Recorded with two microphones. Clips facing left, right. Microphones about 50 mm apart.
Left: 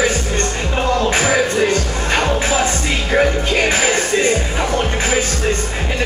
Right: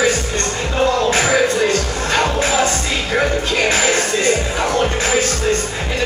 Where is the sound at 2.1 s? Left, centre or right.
Centre.